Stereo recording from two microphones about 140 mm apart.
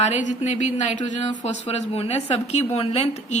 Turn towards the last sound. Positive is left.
turn(degrees=50)  # may be behind; listen again after turning